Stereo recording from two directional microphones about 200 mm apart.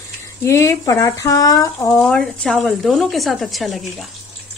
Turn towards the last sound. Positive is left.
turn(degrees=0)  # may be behind; listen again after turning